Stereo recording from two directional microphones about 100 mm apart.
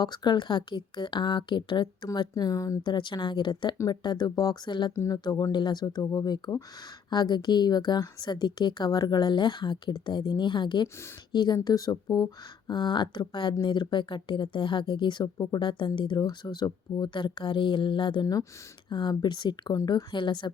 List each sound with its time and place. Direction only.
0.0 s a woman's voice: 45° left (ahead or behind)
2.1 s speech: 40° left (ahead or behind)
2.8 s a woman's voice: 50° left (ahead or behind)
4.9 s a woman's voice: 35° left (ahead or behind)
19.7 s a woman's voice: 35° left (ahead or behind)